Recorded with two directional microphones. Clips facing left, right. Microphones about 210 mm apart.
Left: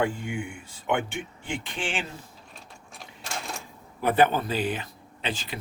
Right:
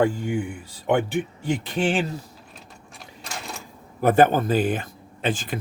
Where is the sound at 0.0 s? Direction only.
40° right (ahead or behind).